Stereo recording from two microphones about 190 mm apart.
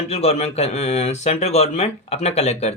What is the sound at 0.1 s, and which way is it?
Speech, 35° left (ahead or behind).